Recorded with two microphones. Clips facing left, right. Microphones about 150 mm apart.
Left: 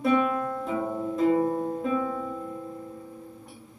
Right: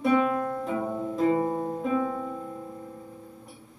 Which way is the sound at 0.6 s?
Centre (ahead or behind).